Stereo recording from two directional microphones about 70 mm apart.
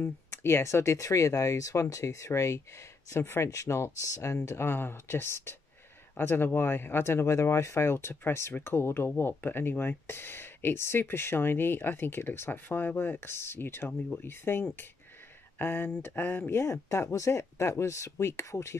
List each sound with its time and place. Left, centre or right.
0.0 s speech: left
4.5 s speech: left
16.5 s speech: left